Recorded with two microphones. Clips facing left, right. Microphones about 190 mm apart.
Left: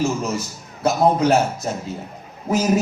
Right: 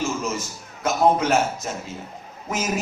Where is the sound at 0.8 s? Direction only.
35° left (ahead or behind).